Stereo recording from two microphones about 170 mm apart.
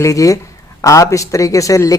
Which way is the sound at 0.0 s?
20° left (ahead or behind).